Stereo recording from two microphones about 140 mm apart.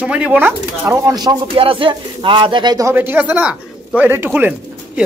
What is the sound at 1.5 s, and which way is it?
Speech, 40° right (ahead or behind).